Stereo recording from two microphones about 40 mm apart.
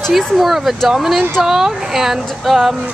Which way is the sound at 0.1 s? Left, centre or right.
Centre.